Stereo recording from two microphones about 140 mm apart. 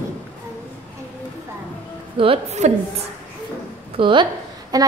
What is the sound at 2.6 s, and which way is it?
Speech, 55° right (ahead or behind).